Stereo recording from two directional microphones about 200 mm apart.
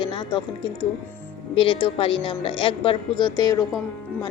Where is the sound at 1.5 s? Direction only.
25° left (ahead or behind).